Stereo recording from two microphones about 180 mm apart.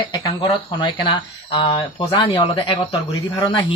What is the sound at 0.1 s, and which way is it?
Speech, 20° left (ahead or behind).